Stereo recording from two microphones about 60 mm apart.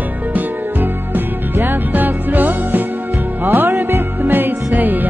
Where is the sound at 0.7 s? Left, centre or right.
Right.